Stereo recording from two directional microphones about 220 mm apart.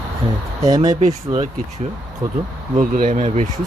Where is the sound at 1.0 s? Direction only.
30° right (ahead or behind).